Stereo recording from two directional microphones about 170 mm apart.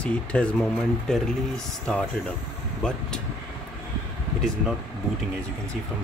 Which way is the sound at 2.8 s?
5° left (ahead or behind).